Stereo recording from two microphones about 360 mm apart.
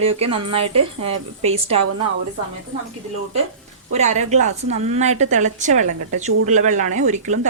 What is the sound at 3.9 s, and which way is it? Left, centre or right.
A woman's voice, centre.